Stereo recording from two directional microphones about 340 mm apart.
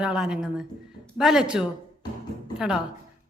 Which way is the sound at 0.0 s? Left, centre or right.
Centre.